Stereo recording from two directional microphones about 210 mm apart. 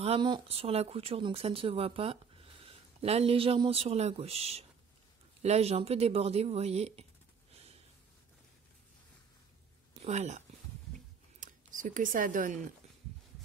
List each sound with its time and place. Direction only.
0.0 s speech: 25° right (ahead or behind)
10.0 s speech: 35° right (ahead or behind)
11.3 s a sound: 40° right (ahead or behind)